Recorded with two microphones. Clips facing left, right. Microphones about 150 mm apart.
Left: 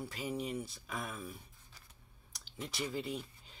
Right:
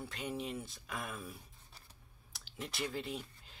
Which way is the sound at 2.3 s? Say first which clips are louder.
Left 1 dB; centre (ahead or behind).